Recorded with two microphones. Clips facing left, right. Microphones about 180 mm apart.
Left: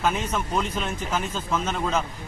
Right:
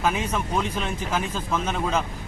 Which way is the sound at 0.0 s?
5° right (ahead or behind).